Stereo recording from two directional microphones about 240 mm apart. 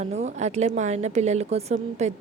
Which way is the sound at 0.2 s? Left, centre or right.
Right.